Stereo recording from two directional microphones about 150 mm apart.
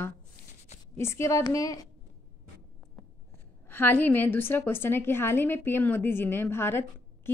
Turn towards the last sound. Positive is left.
turn(degrees=15)  # may be behind; listen again after turning